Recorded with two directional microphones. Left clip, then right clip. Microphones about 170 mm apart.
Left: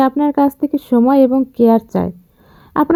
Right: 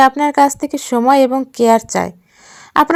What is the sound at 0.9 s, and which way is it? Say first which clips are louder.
Speech: right 2 dB; 40° right (ahead or behind).